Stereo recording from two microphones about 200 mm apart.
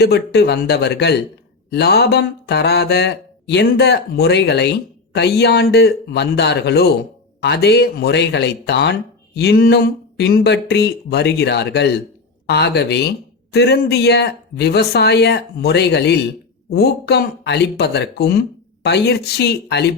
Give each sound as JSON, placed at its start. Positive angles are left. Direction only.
{"t": 0.0, "sound": "speech", "side_deg": 55}